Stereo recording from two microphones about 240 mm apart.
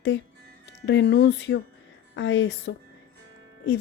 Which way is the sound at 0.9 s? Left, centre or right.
Left.